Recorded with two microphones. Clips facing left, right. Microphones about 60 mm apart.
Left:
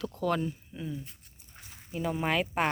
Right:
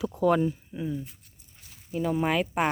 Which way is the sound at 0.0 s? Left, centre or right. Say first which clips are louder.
Right 7 dB; centre.